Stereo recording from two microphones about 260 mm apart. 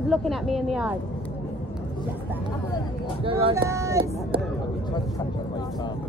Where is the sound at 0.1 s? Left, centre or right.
Centre.